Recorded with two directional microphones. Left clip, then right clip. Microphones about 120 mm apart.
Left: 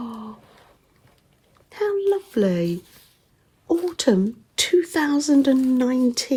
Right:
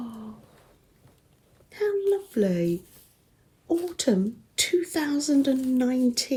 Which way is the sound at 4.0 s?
90° left.